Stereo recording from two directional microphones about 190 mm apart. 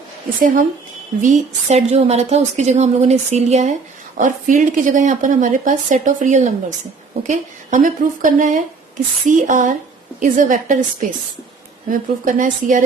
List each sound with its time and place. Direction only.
0.3 s a woman's voice: 45° right (ahead or behind)
11.9 s a woman's voice: 45° right (ahead or behind)